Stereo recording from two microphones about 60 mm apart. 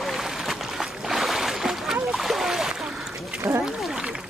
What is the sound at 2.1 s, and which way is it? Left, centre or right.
Splash, centre.